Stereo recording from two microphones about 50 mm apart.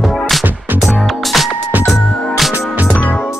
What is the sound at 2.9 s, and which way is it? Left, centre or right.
Music, left.